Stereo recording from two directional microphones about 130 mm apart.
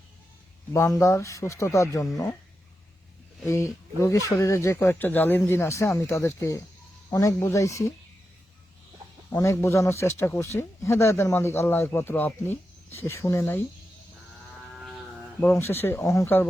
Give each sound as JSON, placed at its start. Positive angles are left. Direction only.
{"t": 0.7, "sound": "speech", "side_deg": 25}
{"t": 3.4, "sound": "speech", "side_deg": 20}
{"t": 9.4, "sound": "speech", "side_deg": 25}
{"t": 14.8, "sound": "a sound", "side_deg": -5}
{"t": 15.4, "sound": "speech", "side_deg": 20}